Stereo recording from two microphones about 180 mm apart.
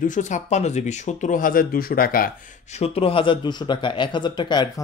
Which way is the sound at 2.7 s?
35° left (ahead or behind).